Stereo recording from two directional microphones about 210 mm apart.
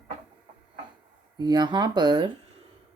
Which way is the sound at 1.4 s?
20° right (ahead or behind).